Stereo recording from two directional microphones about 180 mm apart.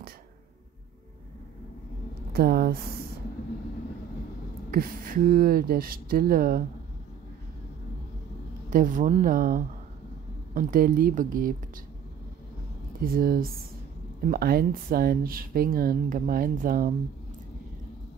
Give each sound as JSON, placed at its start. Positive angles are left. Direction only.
{"t": 2.3, "sound": "speech", "side_deg": -55}
{"t": 4.6, "sound": "speech", "side_deg": -55}
{"t": 8.6, "sound": "speech", "side_deg": -45}
{"t": 13.0, "sound": "speech", "side_deg": -55}